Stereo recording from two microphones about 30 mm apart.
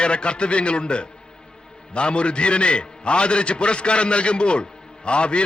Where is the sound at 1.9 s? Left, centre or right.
Left.